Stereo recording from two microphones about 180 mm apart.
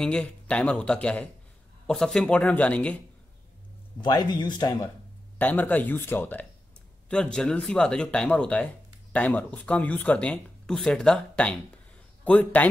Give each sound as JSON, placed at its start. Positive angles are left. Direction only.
{"t": 0.0, "sound": "speech", "side_deg": 5}
{"t": 4.0, "sound": "speech", "side_deg": 25}
{"t": 5.4, "sound": "speech", "side_deg": 10}